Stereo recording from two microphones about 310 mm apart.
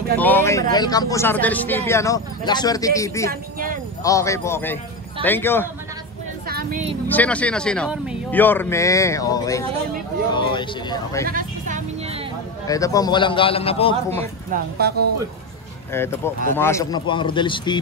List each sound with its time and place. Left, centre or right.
0.2 s a man's voice: centre
3.3 s speech: right
4.0 s a man's voice: centre
6.4 s speech: right
7.1 s a man's voice: centre
11.2 s vehicle: right
12.6 s a man's voice: centre
14.5 s speech: right
15.9 s a man's voice: centre